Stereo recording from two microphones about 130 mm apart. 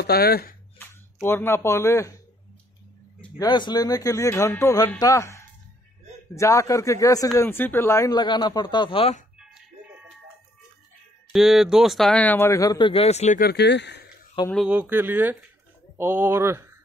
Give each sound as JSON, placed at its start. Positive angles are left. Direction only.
{"t": 0.7, "sound": "speech", "side_deg": 15}
{"t": 3.3, "sound": "speech", "side_deg": 35}
{"t": 11.3, "sound": "speech", "side_deg": -5}
{"t": 14.4, "sound": "speech", "side_deg": 40}
{"t": 14.7, "sound": "speech", "side_deg": -15}